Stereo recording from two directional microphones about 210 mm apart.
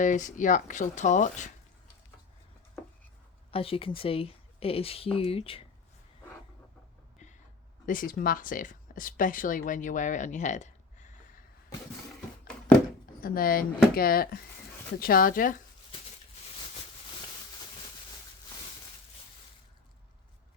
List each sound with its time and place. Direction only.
0.0 s speech: 35° left (ahead or behind)
3.5 s speech: 25° left (ahead or behind)
7.9 s speech: 40° left (ahead or behind)
13.2 s speech: 45° left (ahead or behind)